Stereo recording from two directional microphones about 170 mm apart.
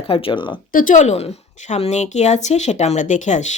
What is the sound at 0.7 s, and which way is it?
A woman's voice, 55° left (ahead or behind).